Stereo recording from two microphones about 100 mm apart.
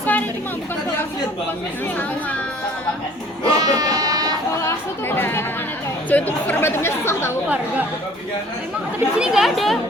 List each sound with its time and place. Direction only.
0.0 s a sound: 15° left (ahead or behind)
3.4 s sheep: 35° right (ahead or behind)
4.6 s chatter: 25° left (ahead or behind)
6.1 s speech: 15° left (ahead or behind)
9.1 s speech: 5° right (ahead or behind)